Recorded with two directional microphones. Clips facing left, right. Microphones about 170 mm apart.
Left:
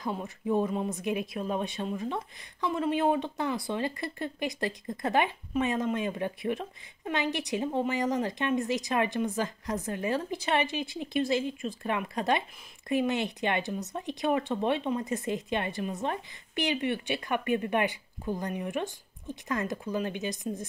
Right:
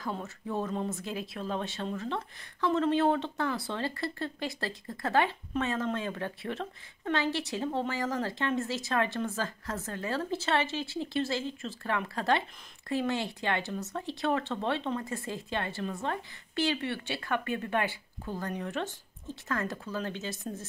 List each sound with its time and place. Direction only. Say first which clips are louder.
0.0 s speech: left 3 dB; 15° left (ahead or behind)